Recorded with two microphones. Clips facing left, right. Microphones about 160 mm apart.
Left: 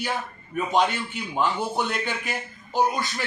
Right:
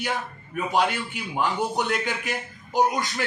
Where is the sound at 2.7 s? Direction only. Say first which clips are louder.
Right 1 dB; 15° right (ahead or behind).